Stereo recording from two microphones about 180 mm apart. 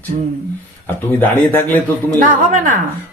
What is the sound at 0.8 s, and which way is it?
Speech, 10° left (ahead or behind).